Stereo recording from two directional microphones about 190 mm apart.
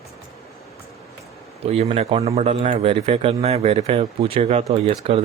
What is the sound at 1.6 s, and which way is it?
Speech, 35° right (ahead or behind).